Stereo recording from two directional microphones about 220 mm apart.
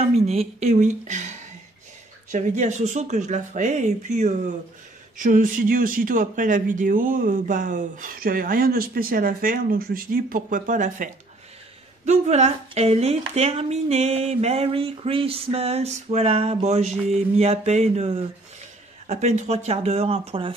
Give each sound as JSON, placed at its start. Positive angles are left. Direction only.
{"t": 0.0, "sound": "a woman's voice", "side_deg": -25}
{"t": 2.3, "sound": "speech", "side_deg": -35}
{"t": 12.1, "sound": "speech", "side_deg": -30}